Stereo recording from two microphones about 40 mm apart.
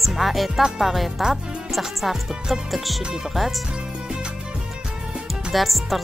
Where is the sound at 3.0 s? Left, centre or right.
Centre.